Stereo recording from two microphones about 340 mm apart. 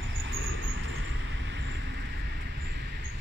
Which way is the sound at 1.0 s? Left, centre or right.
Right.